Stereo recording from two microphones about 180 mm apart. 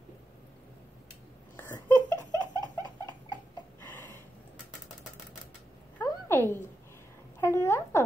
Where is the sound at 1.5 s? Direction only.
10° left (ahead or behind).